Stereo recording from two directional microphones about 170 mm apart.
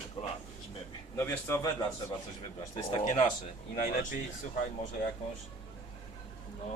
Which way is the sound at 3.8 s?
55° left (ahead or behind).